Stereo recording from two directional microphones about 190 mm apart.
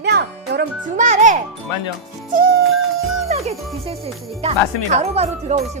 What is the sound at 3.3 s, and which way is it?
Music, 35° right (ahead or behind).